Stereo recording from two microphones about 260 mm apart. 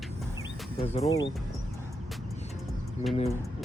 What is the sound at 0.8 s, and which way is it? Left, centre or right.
Speech, left.